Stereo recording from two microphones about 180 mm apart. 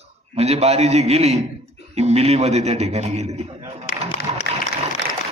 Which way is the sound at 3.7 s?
35° right (ahead or behind).